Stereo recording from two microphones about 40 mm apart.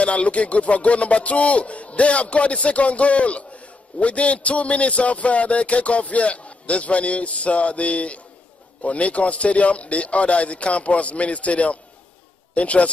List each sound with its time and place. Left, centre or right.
0.0 s a man's voice: left